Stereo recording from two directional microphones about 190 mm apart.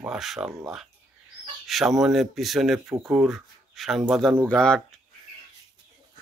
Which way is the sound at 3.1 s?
Centre (ahead or behind).